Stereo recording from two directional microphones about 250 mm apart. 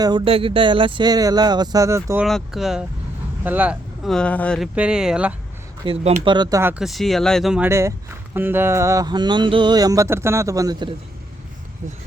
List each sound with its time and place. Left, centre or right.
0.0 s speech: centre
2.2 s speech: centre
5.8 s speech: right